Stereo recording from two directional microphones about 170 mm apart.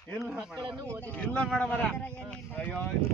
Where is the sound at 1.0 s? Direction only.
10° left (ahead or behind).